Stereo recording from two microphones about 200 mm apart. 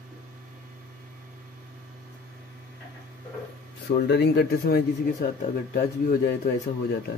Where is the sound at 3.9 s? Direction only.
55° left (ahead or behind).